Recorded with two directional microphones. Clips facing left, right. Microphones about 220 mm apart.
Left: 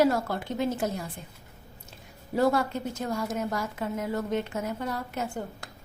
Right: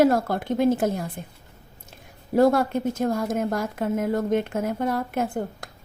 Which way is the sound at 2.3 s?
50° right (ahead or behind).